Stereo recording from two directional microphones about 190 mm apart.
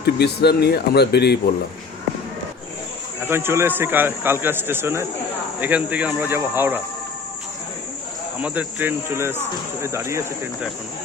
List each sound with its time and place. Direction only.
0.0 s speech: 60° left (ahead or behind)
3.2 s a man's voice: 10° right (ahead or behind)
8.4 s a man's voice: 5° right (ahead or behind)